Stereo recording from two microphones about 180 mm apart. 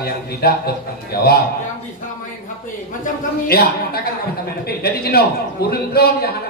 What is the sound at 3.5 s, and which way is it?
A man's voice, 60° left (ahead or behind).